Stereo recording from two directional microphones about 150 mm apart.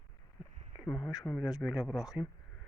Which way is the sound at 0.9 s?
5° right (ahead or behind).